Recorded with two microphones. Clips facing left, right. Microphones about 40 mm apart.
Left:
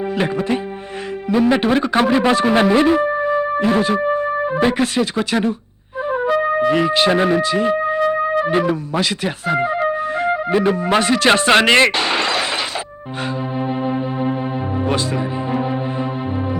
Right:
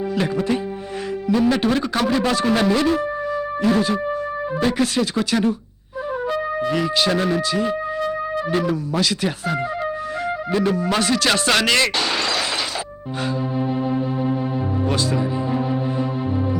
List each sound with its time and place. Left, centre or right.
0.2 s music: left
1.3 s speech: left
6.4 s music: left
10.6 s speech: left
13.6 s organ: left
14.8 s music: left